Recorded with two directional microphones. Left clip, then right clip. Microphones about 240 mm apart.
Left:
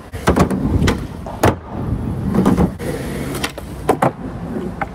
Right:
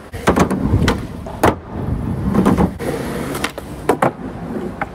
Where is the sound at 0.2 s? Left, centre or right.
Centre.